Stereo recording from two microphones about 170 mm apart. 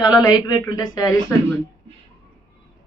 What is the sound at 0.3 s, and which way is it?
Speech, 25° left (ahead or behind).